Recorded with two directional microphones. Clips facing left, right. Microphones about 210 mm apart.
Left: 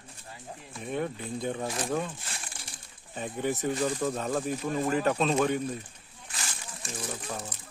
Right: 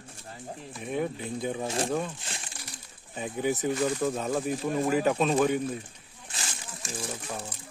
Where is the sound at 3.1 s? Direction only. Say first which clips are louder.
Right 2 dB; 5° right (ahead or behind).